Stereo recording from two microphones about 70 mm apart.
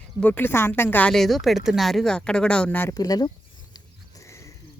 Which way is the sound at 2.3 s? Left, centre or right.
Centre.